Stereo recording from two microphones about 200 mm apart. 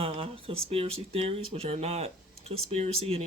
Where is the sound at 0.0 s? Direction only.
30° right (ahead or behind).